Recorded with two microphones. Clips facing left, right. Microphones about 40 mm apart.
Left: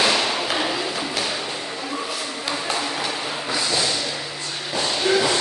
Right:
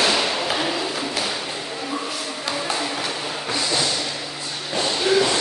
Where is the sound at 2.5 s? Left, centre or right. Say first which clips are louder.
Even; centre.